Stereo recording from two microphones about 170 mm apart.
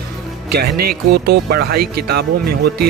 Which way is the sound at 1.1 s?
70° right (ahead or behind).